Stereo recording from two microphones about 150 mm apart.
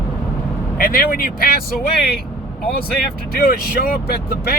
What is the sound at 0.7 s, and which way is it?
Speech, 75° left (ahead or behind).